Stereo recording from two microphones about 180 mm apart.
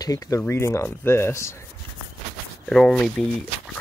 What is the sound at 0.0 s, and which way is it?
Speech, 20° left (ahead or behind).